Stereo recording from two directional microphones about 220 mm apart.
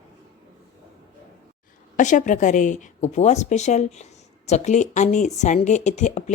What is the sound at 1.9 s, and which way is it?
A woman's voice, 35° left (ahead or behind).